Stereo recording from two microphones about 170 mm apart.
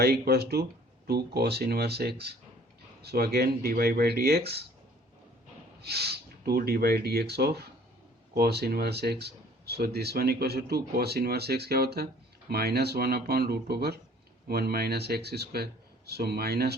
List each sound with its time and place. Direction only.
0.0 s speech: 70° right (ahead or behind)
5.8 s speech: 70° right (ahead or behind)